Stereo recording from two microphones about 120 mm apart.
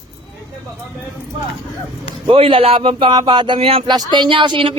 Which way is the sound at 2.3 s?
50° right (ahead or behind).